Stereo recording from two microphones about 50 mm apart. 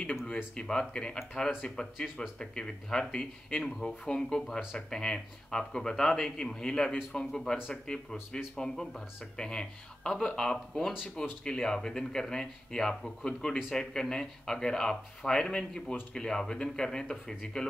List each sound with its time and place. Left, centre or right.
0.6 s speech: centre